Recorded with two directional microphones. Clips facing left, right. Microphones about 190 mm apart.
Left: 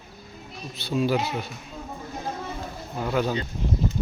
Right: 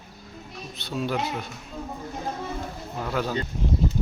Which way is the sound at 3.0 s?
5° left (ahead or behind).